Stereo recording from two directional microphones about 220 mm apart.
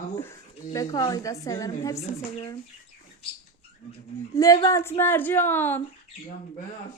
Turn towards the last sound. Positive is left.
turn(degrees=10)  # may be behind; listen again after turning